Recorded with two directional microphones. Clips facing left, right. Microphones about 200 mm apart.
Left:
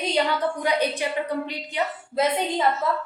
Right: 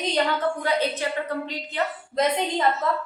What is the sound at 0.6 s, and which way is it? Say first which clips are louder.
A woman's voice: left 1 dB; 15° left (ahead or behind).